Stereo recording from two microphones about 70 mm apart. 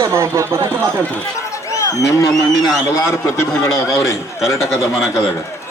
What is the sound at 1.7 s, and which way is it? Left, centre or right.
A man's voice, left.